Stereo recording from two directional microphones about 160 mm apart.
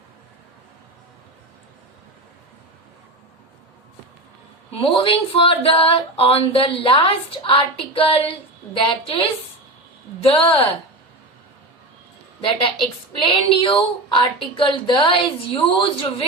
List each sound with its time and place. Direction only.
4.7 s speech: 35° left (ahead or behind)
10.2 s speech: 35° left (ahead or behind)
12.4 s speech: 35° left (ahead or behind)